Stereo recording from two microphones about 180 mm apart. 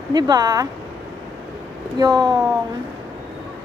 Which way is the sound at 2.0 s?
20° right (ahead or behind).